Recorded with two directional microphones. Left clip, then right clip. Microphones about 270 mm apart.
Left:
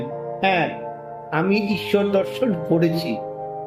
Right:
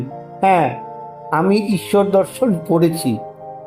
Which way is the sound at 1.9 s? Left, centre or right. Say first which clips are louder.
Right 6 dB; centre.